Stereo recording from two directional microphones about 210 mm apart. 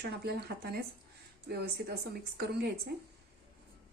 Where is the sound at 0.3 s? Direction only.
50° right (ahead or behind).